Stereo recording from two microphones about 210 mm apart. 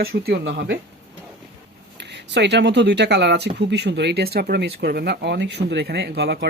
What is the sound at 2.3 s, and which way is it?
Speech, 55° right (ahead or behind).